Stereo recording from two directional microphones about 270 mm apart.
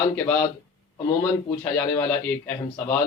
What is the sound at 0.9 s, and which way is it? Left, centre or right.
Speech, centre.